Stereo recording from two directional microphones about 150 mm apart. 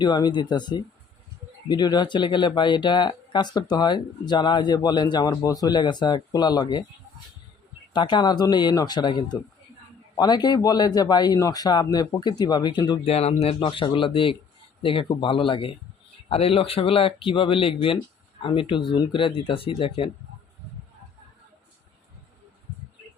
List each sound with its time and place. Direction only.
0.0 s speech: 30° left (ahead or behind)
7.9 s speech: 30° left (ahead or behind)